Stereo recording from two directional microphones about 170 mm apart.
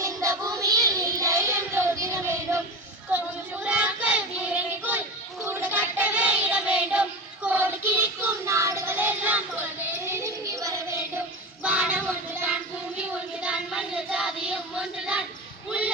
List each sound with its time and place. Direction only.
0.0 s child singing: 20° right (ahead or behind)
3.7 s child singing: 10° right (ahead or behind)